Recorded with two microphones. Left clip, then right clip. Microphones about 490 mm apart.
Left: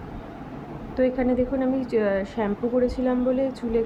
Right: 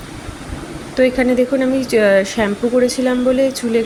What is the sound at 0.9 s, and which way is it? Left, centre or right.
Speech, left.